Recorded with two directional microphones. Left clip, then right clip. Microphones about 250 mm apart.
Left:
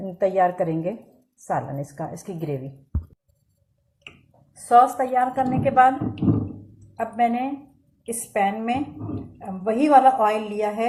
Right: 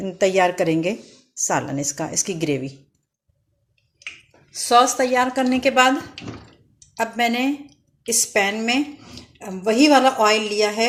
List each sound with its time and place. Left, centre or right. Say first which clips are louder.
0.2 s a woman's voice: right 2 dB; right
4.7 s a woman's voice: right 1 dB; right
6.9 s a woman's voice: right 1 dB; right